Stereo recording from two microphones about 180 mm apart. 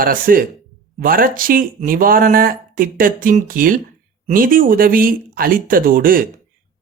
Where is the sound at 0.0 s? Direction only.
50° right (ahead or behind).